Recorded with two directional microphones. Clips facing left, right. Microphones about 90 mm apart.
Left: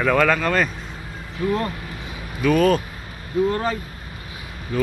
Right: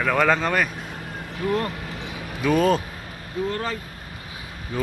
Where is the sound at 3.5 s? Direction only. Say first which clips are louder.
Left 4 dB; 15° left (ahead or behind).